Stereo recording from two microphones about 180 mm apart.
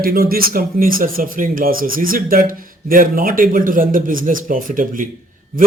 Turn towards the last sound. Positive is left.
turn(degrees=-50)  # may be behind; listen again after turning